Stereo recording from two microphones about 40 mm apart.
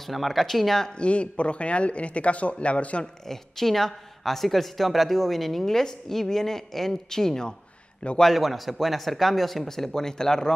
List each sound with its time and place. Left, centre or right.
0.0 s speech: centre
0.8 s speech: left
3.3 s a woman's voice: centre
8.2 s speech: centre